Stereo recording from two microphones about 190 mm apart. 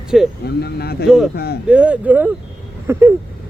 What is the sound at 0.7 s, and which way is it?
Speech, 55° left (ahead or behind).